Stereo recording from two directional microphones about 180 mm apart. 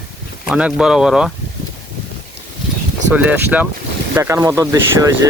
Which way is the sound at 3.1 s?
10° right (ahead or behind).